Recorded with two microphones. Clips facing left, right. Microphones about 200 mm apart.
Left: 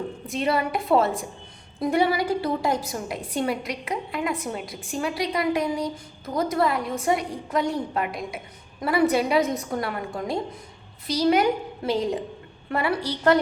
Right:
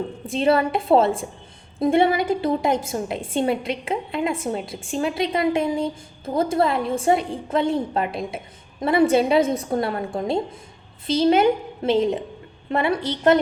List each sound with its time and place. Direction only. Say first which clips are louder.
0.3 s a woman's voice: right 6 dB; 30° right (ahead or behind)